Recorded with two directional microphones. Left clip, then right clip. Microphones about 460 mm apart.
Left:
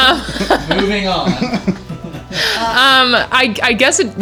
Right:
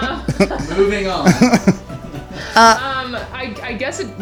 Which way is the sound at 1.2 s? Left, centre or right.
Right.